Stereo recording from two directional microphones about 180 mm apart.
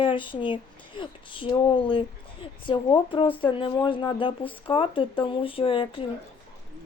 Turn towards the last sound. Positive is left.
turn(degrees=30)  # may be behind; listen again after turning